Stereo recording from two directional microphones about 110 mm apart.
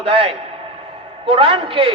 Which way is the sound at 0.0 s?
55° right (ahead or behind).